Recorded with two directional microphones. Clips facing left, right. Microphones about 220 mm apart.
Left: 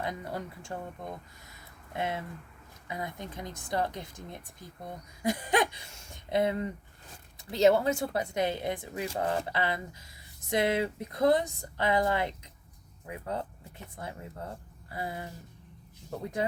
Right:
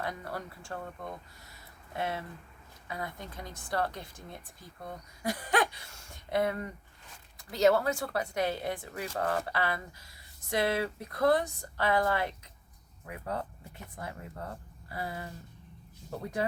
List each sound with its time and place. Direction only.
0.0 s speech: 20° left (ahead or behind)
16.4 s speech: 20° left (ahead or behind)